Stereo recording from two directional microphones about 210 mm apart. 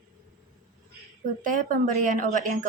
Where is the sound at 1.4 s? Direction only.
40° right (ahead or behind).